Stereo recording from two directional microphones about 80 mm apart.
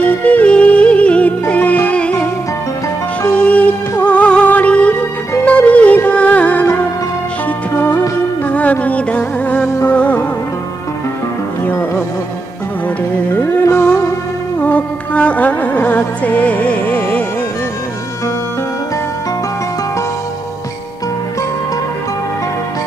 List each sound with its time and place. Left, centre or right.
0.0 s music: centre
8.5 s music: centre
13.3 s music: left